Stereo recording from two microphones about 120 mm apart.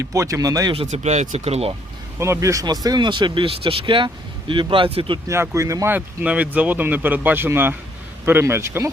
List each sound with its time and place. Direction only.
0.0 s speech: 25° right (ahead or behind)
0.9 s speech: 70° right (ahead or behind)
2.1 s speech: 20° right (ahead or behind); by 5.2 s 50° right (ahead or behind)
5.3 s speech: 25° right (ahead or behind)
5.9 s speech: 10° right (ahead or behind)